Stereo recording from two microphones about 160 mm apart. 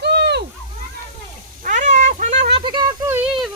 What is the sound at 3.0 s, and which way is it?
Child singing, 15° right (ahead or behind).